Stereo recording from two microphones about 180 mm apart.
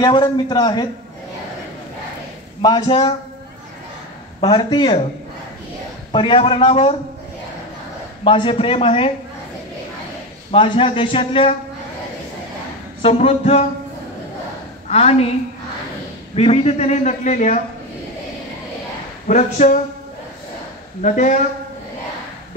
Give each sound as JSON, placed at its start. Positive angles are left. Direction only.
{"t": 0.0, "sound": "a man's voice", "side_deg": 25}
{"t": 2.6, "sound": "a man's voice", "side_deg": 25}
{"t": 4.4, "sound": "a man's voice", "side_deg": 25}
{"t": 6.1, "sound": "a man's voice", "side_deg": 30}
{"t": 8.2, "sound": "a man's voice", "side_deg": 30}
{"t": 10.5, "sound": "a man's voice", "side_deg": 30}
{"t": 13.0, "sound": "a man's voice", "side_deg": 35}
{"t": 14.9, "sound": "a man's voice", "side_deg": 35}
{"t": 16.3, "sound": "a man's voice", "side_deg": 35}
{"t": 19.2, "sound": "speech", "side_deg": 45}
{"t": 21.0, "sound": "speech", "side_deg": 45}